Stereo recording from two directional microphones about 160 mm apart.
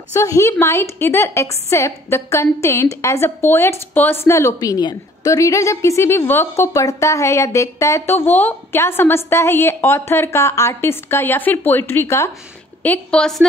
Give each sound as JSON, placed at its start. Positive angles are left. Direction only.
{"t": 0.1, "sound": "a woman's voice", "side_deg": 20}